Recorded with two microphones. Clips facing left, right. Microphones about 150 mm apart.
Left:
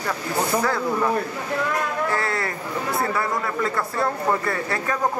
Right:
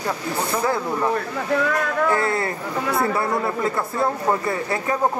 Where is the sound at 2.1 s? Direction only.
25° right (ahead or behind).